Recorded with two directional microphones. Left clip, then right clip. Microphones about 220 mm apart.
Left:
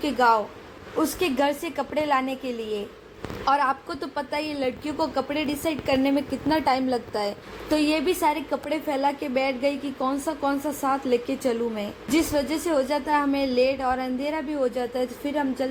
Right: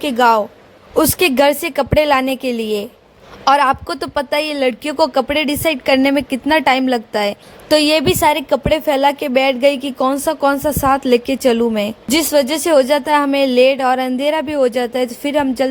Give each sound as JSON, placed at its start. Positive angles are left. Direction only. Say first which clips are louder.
{"t": 0.0, "sound": "a woman's voice", "louder": "right 8 dB", "side_deg": -45}